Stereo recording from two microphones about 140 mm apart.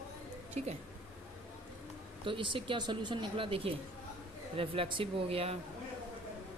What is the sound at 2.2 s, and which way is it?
Speech, 35° right (ahead or behind).